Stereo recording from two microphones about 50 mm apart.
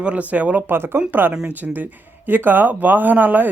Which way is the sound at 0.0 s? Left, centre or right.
Right.